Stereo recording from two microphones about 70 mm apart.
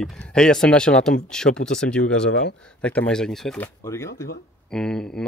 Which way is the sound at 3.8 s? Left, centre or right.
Left.